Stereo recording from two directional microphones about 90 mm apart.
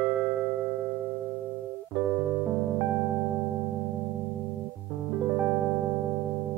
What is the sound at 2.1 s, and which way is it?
Music, 20° right (ahead or behind).